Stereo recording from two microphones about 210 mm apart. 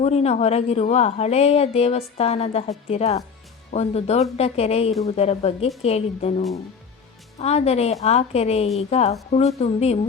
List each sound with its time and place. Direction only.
0.0 s speech: 30° left (ahead or behind)
7.3 s speech: 30° left (ahead or behind)